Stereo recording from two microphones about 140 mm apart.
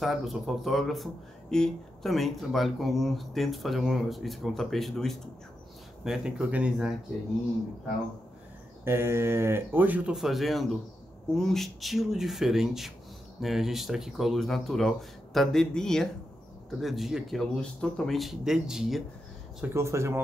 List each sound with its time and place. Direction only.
0.0 s speech: centre (ahead or behind)
8.8 s speech: 15° right (ahead or behind)
19.6 s speech: 20° right (ahead or behind)